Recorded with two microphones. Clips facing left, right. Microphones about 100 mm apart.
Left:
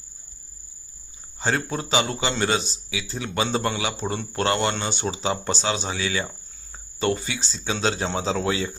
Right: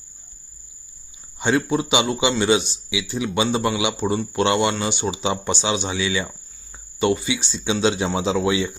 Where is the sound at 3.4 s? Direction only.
10° right (ahead or behind).